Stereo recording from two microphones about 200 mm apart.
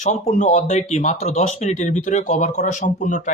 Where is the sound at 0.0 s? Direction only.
35° left (ahead or behind).